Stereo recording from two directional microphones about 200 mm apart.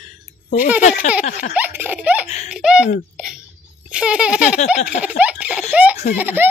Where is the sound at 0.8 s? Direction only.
35° left (ahead or behind).